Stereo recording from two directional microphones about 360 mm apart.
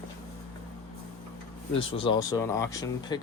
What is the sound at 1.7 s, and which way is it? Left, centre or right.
Speech, centre.